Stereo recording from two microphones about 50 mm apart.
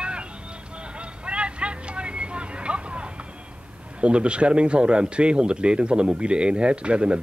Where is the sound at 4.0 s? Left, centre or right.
Right.